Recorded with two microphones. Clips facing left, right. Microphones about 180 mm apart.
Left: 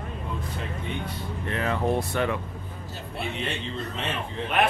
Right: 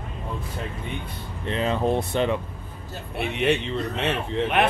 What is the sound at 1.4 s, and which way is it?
Speech, 20° right (ahead or behind).